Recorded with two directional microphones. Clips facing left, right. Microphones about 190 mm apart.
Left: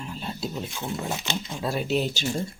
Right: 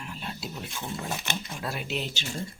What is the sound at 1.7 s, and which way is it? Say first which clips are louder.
Speech: left 9 dB; 40° left (ahead or behind).